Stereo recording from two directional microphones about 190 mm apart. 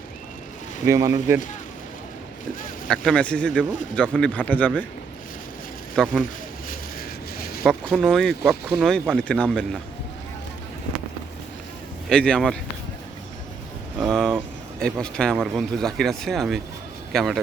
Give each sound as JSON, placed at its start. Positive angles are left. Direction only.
{"t": 0.9, "sound": "speech", "side_deg": -15}
{"t": 2.8, "sound": "a man's voice", "side_deg": 5}
{"t": 6.0, "sound": "speech", "side_deg": 5}
{"t": 7.3, "sound": "a sound", "side_deg": 50}
{"t": 7.6, "sound": "speech", "side_deg": 5}
{"t": 12.0, "sound": "speech", "side_deg": 5}
{"t": 14.0, "sound": "speech", "side_deg": 0}